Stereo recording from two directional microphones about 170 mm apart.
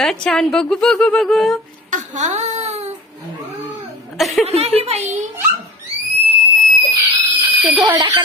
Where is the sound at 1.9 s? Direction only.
45° right (ahead or behind).